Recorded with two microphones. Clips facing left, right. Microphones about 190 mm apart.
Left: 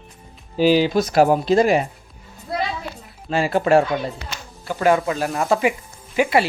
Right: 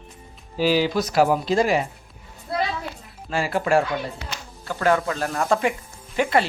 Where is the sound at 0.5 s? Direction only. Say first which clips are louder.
Left 4 dB; 20° left (ahead or behind).